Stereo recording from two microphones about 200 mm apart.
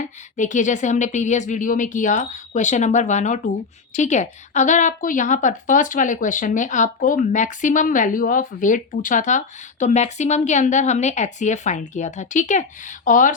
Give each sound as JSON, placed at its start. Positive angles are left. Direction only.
{"t": 0.3, "sound": "a woman's voice", "side_deg": 40}